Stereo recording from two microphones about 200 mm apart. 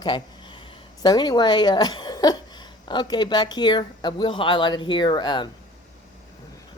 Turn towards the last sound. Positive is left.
turn(degrees=20)  # may be behind; listen again after turning